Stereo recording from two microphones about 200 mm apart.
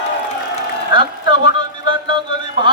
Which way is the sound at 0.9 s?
25° right (ahead or behind).